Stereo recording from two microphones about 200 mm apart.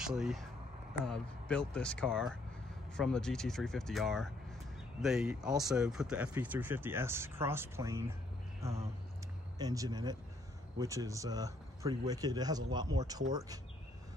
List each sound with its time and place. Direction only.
0.0 s speech: centre (ahead or behind); by 13.6 s 20° right (ahead or behind)